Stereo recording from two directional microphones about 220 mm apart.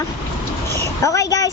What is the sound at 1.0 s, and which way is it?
Speech, 15° left (ahead or behind).